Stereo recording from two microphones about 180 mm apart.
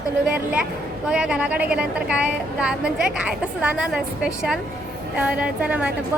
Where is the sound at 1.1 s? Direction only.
5° right (ahead or behind).